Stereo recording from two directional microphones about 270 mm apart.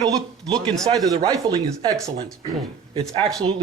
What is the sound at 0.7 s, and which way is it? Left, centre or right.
A man's voice, centre.